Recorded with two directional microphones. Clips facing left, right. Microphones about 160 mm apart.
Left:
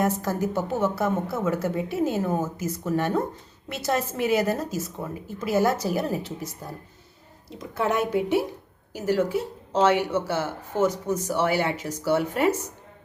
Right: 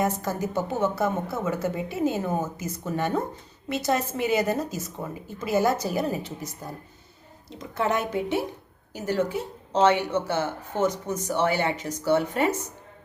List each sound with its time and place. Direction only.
0.0 s speech: centre (ahead or behind)